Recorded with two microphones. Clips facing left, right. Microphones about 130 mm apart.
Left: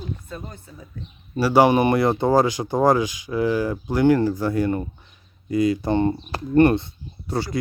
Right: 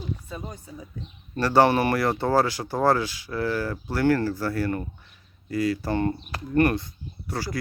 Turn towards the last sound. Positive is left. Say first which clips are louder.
# left 5 dB
turn(degrees=25)  # may be behind; listen again after turning